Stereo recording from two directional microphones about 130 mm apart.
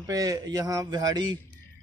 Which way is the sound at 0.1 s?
30° right (ahead or behind).